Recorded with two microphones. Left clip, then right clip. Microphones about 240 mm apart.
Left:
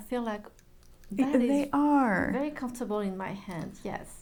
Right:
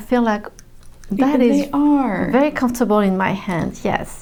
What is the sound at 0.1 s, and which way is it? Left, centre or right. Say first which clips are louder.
Speech: right 15 dB; right.